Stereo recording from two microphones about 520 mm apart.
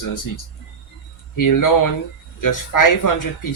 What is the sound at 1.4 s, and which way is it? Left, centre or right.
Speech, left.